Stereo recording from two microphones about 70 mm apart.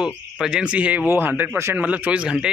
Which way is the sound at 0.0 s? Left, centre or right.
Centre.